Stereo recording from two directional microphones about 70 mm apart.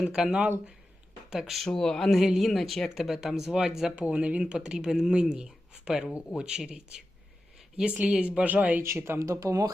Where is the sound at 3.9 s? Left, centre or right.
Centre.